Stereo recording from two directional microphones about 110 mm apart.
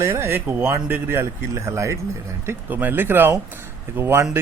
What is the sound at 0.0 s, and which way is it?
Speech, 20° right (ahead or behind).